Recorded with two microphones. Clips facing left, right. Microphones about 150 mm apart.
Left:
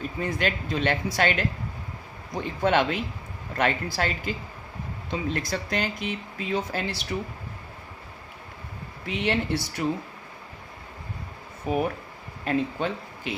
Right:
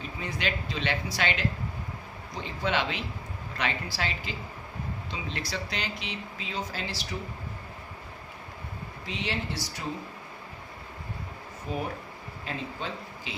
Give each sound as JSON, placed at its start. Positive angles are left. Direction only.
{"t": 0.2, "sound": "speech", "side_deg": 50}
{"t": 9.0, "sound": "speech", "side_deg": 60}
{"t": 11.7, "sound": "speech", "side_deg": 65}